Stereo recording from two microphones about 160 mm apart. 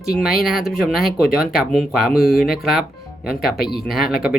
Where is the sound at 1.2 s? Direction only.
70° left (ahead or behind).